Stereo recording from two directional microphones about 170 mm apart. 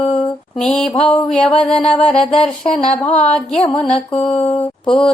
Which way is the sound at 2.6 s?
35° left (ahead or behind).